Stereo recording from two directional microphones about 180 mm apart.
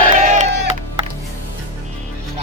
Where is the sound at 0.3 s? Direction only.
40° right (ahead or behind).